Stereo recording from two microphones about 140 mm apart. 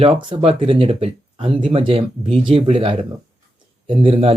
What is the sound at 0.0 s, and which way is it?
Speech, 40° right (ahead or behind).